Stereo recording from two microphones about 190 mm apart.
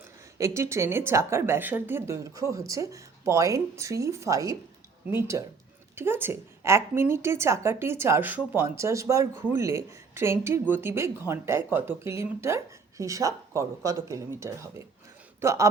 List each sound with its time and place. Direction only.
0.3 s a woman's voice: 15° right (ahead or behind)